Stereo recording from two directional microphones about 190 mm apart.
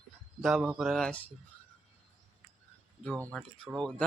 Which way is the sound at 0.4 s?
Centre (ahead or behind).